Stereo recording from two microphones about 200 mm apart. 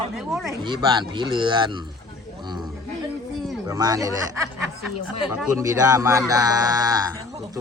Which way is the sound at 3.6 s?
15° right (ahead or behind).